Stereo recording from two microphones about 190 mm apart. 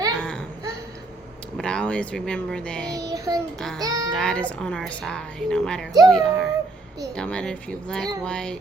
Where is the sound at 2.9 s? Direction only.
20° right (ahead or behind).